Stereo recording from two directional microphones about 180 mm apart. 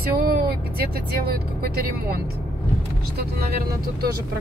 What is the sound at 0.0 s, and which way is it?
Speech, 55° right (ahead or behind).